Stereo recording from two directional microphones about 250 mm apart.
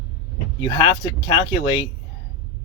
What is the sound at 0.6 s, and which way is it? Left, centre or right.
Speech, centre.